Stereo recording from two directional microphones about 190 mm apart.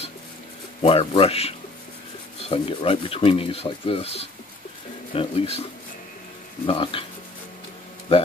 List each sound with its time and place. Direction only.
0.8 s speech: 30° left (ahead or behind)
2.5 s speech: 30° left (ahead or behind)